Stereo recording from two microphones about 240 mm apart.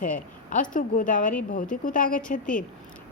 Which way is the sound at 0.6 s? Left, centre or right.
Left.